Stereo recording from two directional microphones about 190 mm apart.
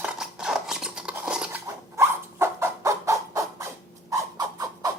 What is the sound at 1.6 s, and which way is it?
Rodents, 15° right (ahead or behind).